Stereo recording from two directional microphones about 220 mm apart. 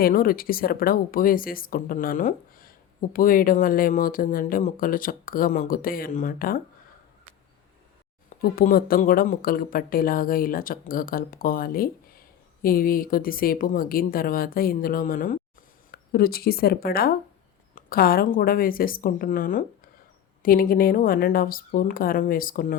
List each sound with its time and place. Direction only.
0.0 s speech: 40° left (ahead or behind)
8.4 s speech: 40° left (ahead or behind)